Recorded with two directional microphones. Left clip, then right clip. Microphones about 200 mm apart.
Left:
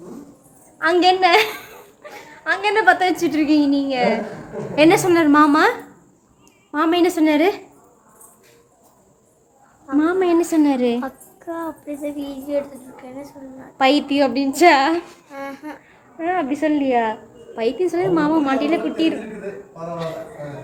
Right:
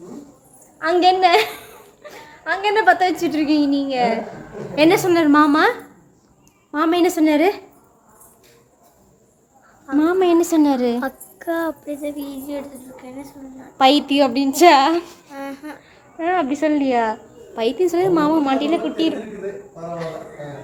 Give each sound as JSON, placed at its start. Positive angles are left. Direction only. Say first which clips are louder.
{"t": 0.8, "sound": "a woman's voice", "louder": "even", "side_deg": -5}
{"t": 9.8, "sound": "a woman's voice", "louder": "right 1 dB", "side_deg": -15}
{"t": 11.0, "sound": "a woman's voice", "louder": "right 4 dB", "side_deg": -25}
{"t": 11.9, "sound": "a woman's voice", "louder": "even", "side_deg": 0}
{"t": 13.7, "sound": "a woman's voice", "louder": "right 2 dB", "side_deg": -15}
{"t": 15.3, "sound": "a woman's voice", "louder": "even", "side_deg": 5}
{"t": 16.1, "sound": "a woman's voice", "louder": "right 2 dB", "side_deg": -15}